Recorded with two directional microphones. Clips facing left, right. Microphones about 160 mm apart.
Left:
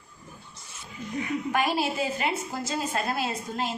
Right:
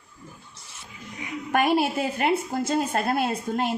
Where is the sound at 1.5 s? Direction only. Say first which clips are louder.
Right 6 dB; 55° right (ahead or behind).